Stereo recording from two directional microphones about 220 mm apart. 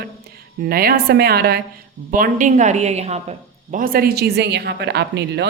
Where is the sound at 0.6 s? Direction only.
40° right (ahead or behind).